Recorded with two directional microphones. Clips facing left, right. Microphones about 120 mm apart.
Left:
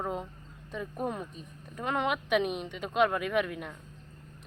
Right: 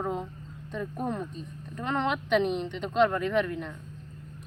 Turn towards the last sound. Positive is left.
turn(degrees=10)  # may be behind; listen again after turning